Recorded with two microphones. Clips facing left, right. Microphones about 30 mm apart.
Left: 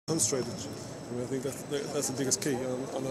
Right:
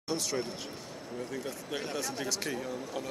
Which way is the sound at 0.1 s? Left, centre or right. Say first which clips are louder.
Left 2 dB; right.